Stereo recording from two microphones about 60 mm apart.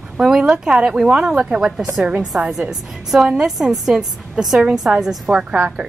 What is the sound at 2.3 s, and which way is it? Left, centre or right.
Speech, right.